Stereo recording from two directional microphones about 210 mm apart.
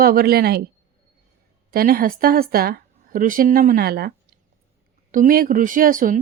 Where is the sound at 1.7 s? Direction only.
45° right (ahead or behind).